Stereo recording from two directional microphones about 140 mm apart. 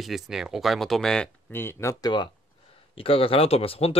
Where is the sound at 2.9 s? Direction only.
40° left (ahead or behind).